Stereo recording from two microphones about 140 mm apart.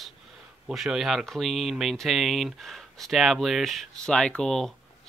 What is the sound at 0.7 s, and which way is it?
Speech, centre (ahead or behind).